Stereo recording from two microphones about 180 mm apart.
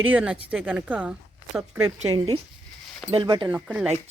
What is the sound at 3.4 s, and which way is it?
Speech, 5° right (ahead or behind).